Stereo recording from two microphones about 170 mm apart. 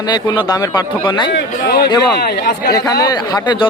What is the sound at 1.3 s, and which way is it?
Speech, 70° left (ahead or behind).